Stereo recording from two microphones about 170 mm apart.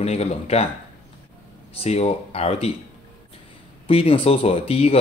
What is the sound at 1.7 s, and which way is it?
Speech, 35° left (ahead or behind).